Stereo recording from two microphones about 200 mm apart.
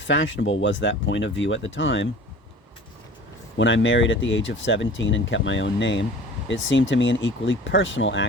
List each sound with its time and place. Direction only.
0.0 s speech: 70° left (ahead or behind)
3.6 s speech: 70° left (ahead or behind)